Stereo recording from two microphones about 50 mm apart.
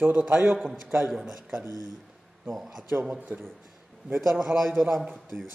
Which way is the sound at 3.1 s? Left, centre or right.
Right.